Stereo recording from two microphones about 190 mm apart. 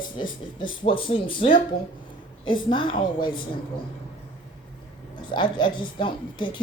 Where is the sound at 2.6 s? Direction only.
25° left (ahead or behind).